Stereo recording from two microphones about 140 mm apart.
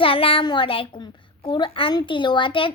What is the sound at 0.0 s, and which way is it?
A child's voice, 40° left (ahead or behind).